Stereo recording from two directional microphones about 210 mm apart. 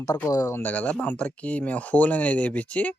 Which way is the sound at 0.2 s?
15° left (ahead or behind).